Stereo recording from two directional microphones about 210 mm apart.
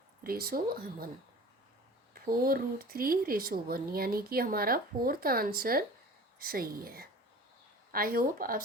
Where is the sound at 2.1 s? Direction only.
45° right (ahead or behind).